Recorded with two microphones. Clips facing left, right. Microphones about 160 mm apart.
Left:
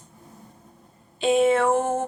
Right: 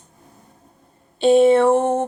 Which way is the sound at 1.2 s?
35° right (ahead or behind).